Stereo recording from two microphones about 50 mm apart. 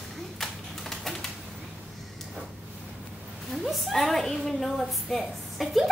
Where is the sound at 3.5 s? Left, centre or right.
Centre.